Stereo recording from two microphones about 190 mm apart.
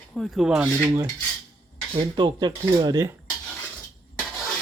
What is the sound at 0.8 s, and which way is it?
Speech, 15° right (ahead or behind).